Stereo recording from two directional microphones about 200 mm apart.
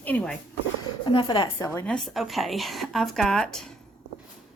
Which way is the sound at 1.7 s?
10° left (ahead or behind).